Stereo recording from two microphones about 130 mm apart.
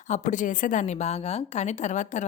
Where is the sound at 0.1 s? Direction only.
80° left.